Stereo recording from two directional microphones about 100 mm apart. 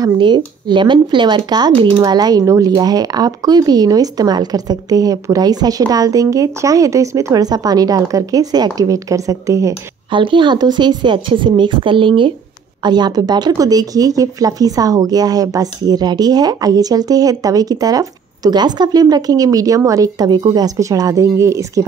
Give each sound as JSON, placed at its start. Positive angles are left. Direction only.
{"t": 0.0, "sound": "speech", "side_deg": -50}
{"t": 10.1, "sound": "speech", "side_deg": -55}
{"t": 12.8, "sound": "speech", "side_deg": -45}